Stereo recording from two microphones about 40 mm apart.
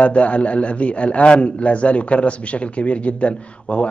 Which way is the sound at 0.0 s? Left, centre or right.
Left.